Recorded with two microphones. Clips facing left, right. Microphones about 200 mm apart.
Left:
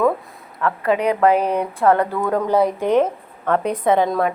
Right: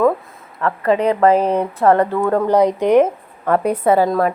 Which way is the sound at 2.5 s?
15° right (ahead or behind).